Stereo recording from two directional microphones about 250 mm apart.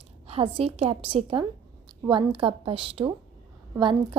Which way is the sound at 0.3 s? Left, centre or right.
Right.